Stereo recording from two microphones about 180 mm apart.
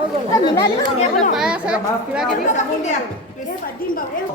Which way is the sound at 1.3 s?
5° right (ahead or behind).